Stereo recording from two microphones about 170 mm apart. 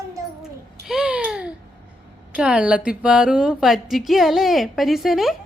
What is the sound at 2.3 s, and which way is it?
Speech, 5° right (ahead or behind).